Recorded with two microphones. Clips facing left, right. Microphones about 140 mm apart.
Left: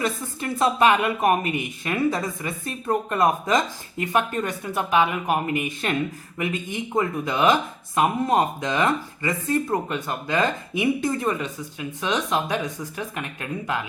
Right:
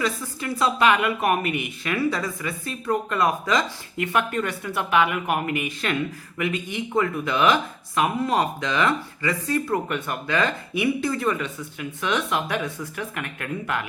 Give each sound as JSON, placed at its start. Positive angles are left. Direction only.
{"t": 0.0, "sound": "a woman's voice", "side_deg": 20}